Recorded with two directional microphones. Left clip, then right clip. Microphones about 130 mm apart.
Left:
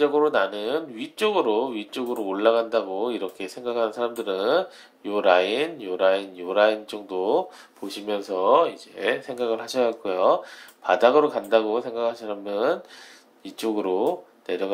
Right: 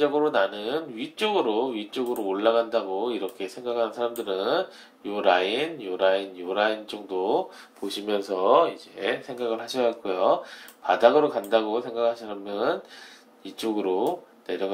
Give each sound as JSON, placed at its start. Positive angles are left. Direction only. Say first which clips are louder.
{"t": 0.0, "sound": "speech", "louder": "left 2 dB", "side_deg": 40}
{"t": 7.9, "sound": "speech", "louder": "even", "side_deg": 10}
{"t": 8.9, "sound": "speech", "louder": "left 3 dB", "side_deg": 30}